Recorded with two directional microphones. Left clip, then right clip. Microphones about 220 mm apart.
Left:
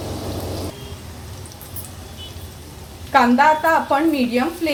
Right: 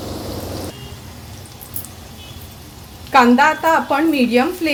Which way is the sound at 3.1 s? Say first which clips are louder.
Right 2 dB; 50° right (ahead or behind).